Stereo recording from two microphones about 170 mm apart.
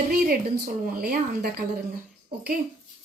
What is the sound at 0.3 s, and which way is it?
A woman's voice, 65° right (ahead or behind).